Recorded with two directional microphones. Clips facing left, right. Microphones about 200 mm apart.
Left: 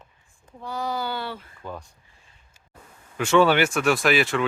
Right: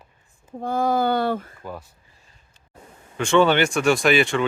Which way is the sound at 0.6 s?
50° right (ahead or behind).